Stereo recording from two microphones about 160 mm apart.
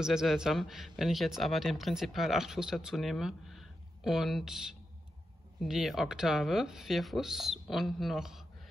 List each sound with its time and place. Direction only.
0.0 s a man's voice: 5° right (ahead or behind)